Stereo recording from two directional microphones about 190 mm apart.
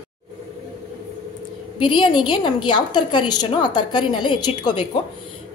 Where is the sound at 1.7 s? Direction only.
25° left (ahead or behind).